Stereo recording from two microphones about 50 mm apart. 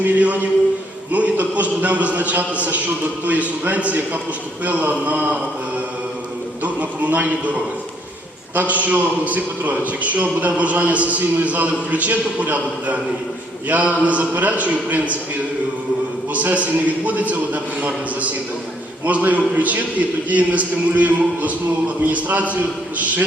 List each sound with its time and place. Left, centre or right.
0.0 s a man's voice: right
16.3 s a man's voice: right